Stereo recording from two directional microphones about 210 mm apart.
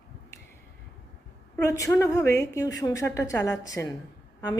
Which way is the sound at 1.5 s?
15° left (ahead or behind).